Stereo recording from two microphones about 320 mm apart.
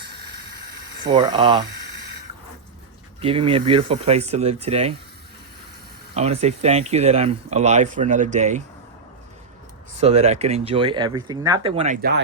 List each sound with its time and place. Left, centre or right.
0.0 s a sound: right
1.1 s speech: centre
3.2 s speech: centre
6.1 s speech: centre
10.0 s speech: centre